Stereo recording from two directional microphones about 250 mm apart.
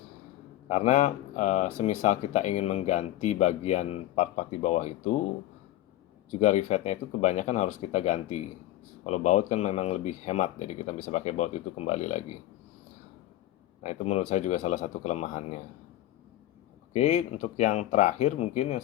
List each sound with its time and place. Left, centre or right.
0.7 s speech: left
6.4 s speech: left
13.8 s speech: left
16.9 s speech: left